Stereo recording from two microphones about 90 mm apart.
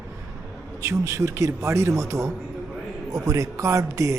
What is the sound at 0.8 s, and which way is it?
Speech, 35° right (ahead or behind).